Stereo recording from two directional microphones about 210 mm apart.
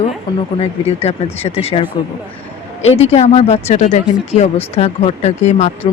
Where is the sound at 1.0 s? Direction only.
30° left (ahead or behind).